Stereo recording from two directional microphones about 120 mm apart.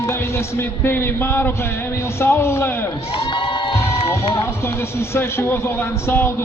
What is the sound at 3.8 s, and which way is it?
Speech, 20° left (ahead or behind).